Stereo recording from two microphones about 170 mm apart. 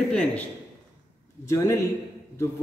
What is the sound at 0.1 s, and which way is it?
Speech, 10° left (ahead or behind).